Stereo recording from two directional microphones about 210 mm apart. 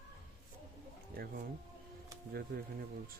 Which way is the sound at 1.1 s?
45° right (ahead or behind).